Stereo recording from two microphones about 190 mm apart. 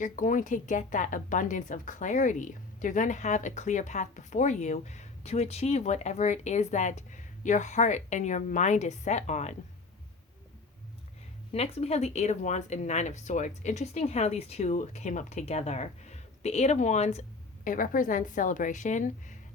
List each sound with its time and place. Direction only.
0.0 s a woman's voice: 45° left (ahead or behind)
11.5 s a woman's voice: 35° left (ahead or behind)